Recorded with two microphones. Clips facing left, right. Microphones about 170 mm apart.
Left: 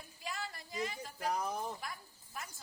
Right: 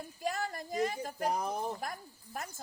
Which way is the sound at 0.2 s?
45° right (ahead or behind).